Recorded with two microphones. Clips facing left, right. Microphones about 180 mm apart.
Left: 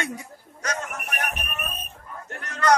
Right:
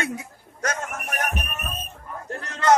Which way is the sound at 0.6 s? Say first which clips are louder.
Right 2 dB; 50° right (ahead or behind).